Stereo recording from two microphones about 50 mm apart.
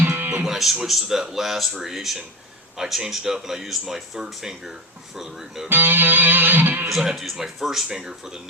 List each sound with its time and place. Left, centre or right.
0.0 s music: right
0.4 s speech: centre
5.6 s music: right
6.8 s speech: centre
7.9 s speech: centre